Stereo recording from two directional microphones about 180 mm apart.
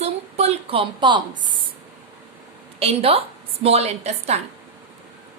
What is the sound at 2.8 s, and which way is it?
A woman's voice, 35° right (ahead or behind).